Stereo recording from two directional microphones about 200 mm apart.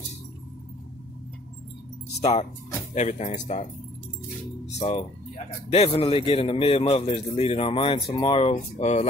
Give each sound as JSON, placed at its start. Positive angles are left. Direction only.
{"t": 2.9, "sound": "speech", "side_deg": 35}
{"t": 4.6, "sound": "a man's voice", "side_deg": 30}